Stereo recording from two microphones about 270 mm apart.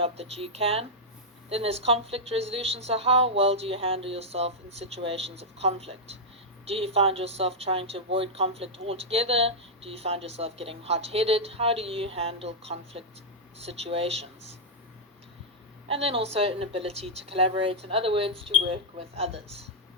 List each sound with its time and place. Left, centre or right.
0.0 s a woman's voice: right
15.9 s a woman's voice: right